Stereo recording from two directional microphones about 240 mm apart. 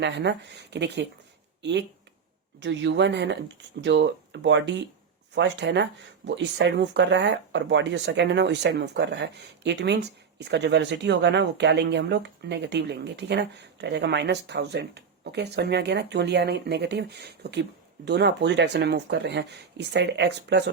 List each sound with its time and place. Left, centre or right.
0.0 s speech: right
2.6 s speech: right